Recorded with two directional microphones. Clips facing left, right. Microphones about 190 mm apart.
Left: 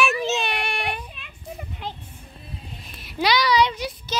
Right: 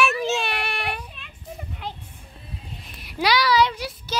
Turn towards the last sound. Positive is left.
turn(degrees=-10)  # may be behind; listen again after turning